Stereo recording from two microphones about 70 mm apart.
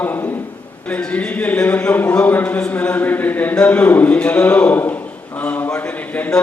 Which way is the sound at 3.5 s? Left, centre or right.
Centre.